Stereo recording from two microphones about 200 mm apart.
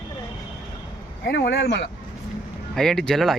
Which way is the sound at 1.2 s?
55° left (ahead or behind).